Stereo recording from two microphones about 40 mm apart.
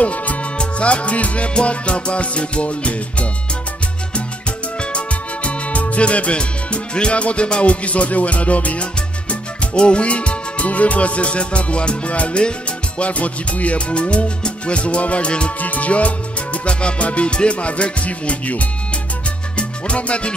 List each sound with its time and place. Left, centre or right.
0.0 s music: left
4.9 s music: left
15.6 s music: left